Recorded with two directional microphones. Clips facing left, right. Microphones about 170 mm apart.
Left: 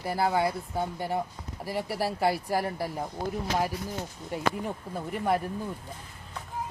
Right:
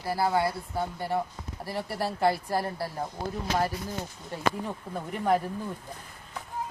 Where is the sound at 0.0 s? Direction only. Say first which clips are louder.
Even; 20° left (ahead or behind).